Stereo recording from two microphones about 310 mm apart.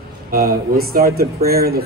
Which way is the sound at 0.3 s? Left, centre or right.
Right.